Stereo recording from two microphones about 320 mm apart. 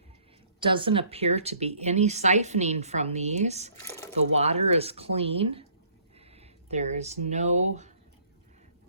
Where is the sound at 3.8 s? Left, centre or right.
Centre.